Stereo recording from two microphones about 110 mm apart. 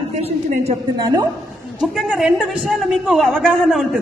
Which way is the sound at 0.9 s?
35° right (ahead or behind).